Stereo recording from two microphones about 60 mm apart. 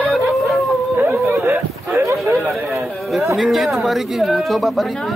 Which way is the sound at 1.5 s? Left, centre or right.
Right.